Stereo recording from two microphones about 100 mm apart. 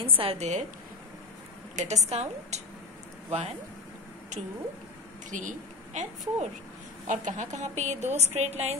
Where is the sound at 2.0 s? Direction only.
90° right.